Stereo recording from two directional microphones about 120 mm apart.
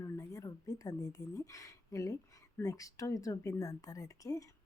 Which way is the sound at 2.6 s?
30° left (ahead or behind).